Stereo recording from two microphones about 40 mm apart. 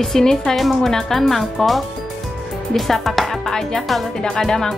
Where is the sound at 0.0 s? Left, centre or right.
Centre.